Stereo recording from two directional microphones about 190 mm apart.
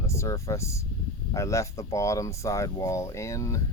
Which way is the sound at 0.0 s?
15° left (ahead or behind).